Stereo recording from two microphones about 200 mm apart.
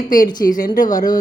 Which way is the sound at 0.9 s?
20° left (ahead or behind).